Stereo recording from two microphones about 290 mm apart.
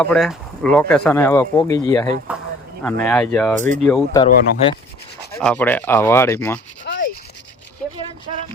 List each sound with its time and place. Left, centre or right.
0.0 s speech: centre
2.3 s speech: centre
6.9 s rub: left